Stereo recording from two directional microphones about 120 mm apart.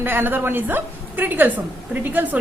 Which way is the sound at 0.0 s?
15° right (ahead or behind).